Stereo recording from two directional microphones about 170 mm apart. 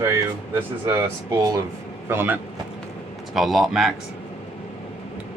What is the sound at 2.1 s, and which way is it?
Speech, 15° right (ahead or behind).